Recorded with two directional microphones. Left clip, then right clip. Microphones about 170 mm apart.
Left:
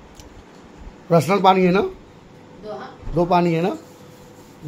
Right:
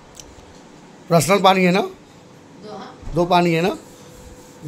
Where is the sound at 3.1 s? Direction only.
5° right (ahead or behind).